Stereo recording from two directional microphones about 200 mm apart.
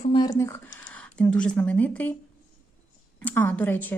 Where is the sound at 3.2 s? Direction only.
10° left (ahead or behind).